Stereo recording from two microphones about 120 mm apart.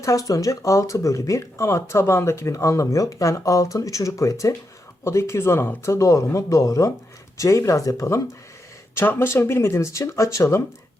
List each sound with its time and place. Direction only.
0.0 s speech: 25° left (ahead or behind)